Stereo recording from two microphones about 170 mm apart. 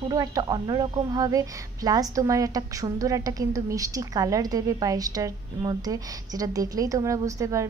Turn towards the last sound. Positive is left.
turn(degrees=-20)  # may be behind; listen again after turning